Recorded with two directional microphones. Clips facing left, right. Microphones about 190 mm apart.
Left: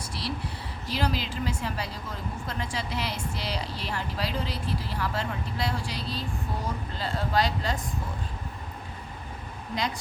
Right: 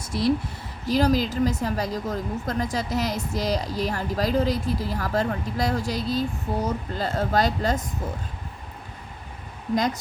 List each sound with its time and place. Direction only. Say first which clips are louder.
0.1 s a woman's voice: right 13 dB; 50° right (ahead or behind)